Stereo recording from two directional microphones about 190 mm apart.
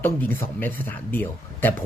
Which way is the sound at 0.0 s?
10° left (ahead or behind).